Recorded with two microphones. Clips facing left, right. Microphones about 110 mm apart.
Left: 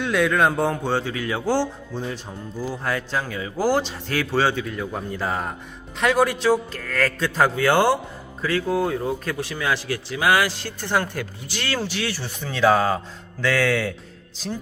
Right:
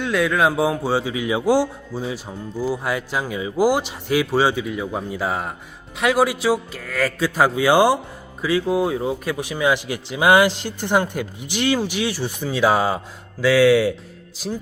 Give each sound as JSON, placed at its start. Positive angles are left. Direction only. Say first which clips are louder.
{"t": 0.0, "sound": "a man's voice", "louder": "right 1 dB", "side_deg": 0}